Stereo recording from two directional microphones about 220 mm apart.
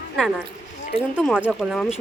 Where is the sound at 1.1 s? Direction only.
5° right (ahead or behind).